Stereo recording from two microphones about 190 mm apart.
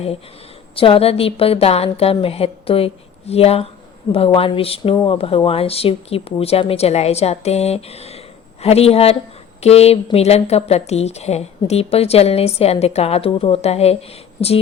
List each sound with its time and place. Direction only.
0.8 s speech: 30° left (ahead or behind)